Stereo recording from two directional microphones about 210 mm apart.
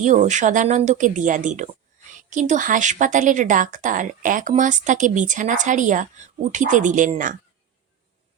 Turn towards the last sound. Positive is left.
turn(degrees=-40)  # may be behind; listen again after turning